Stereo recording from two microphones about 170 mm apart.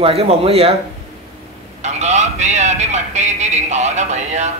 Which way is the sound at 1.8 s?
40° right (ahead or behind).